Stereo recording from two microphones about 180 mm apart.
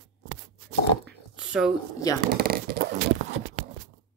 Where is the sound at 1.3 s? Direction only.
5° right (ahead or behind).